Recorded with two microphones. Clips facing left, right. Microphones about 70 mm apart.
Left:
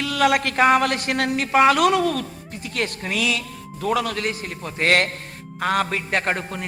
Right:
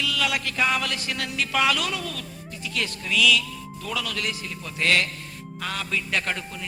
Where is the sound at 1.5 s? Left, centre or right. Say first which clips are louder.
Left 8 dB; left.